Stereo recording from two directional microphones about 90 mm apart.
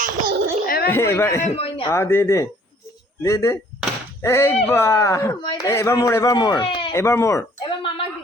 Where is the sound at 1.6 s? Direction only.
90° left.